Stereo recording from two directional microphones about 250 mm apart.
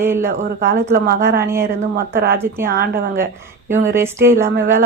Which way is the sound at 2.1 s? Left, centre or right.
Right.